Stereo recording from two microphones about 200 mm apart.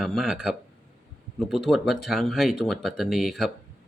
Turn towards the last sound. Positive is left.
turn(degrees=0)  # may be behind; listen again after turning